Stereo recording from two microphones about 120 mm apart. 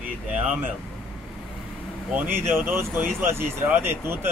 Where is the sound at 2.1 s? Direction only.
20° right (ahead or behind).